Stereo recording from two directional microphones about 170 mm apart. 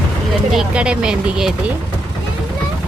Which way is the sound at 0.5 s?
5° right (ahead or behind).